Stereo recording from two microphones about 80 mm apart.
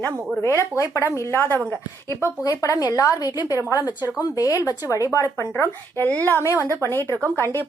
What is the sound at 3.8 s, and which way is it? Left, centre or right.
Speech, right.